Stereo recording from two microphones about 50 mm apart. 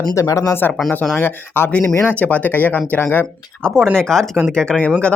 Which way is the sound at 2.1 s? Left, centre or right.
Left.